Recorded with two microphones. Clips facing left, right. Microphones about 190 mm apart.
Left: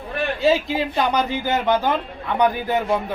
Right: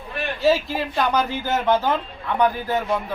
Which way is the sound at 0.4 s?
20° left (ahead or behind).